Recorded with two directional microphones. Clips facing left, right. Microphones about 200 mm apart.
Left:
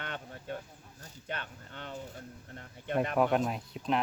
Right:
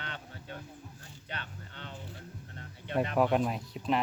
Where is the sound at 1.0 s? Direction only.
50° left (ahead or behind).